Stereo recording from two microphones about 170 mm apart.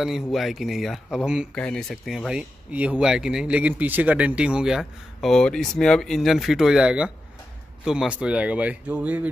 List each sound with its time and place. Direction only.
0.0 s speech: centre (ahead or behind)
1.5 s speech: 5° left (ahead or behind)